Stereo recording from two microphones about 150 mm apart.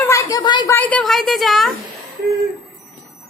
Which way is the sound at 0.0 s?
20° left (ahead or behind).